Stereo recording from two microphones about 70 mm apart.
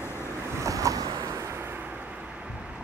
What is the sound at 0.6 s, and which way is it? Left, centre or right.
Waves, right.